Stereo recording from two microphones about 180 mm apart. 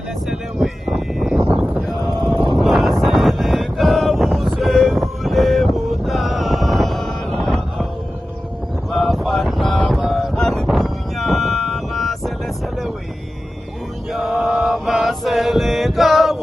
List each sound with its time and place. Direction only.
0.3 s a sound: centre (ahead or behind)
2.2 s vehicle: 25° right (ahead or behind)
2.6 s wind noise: centre (ahead or behind)
8.9 s wind noise: centre (ahead or behind)
10.0 s a sound: centre (ahead or behind)
14.1 s mantra: centre (ahead or behind)